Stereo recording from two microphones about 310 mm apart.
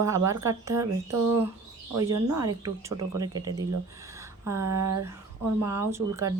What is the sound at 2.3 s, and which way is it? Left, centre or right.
Speech, centre.